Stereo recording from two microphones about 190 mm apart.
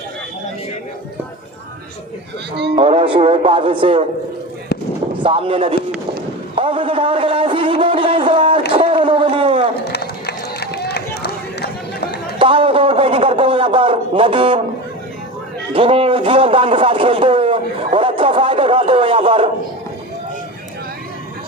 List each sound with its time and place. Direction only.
2.7 s speech: 30° right (ahead or behind)
5.2 s a man's voice: 30° right (ahead or behind)
8.7 s a sound: 30° right (ahead or behind)
9.9 s run: 60° left (ahead or behind)
12.4 s a man's voice: 25° right (ahead or behind)
15.7 s a man's voice: 30° right (ahead or behind)